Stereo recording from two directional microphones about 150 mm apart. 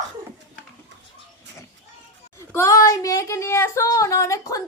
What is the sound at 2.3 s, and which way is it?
Speech, 20° left (ahead or behind).